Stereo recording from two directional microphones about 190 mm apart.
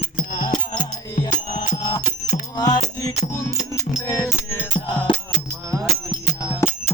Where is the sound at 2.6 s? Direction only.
20° left (ahead or behind).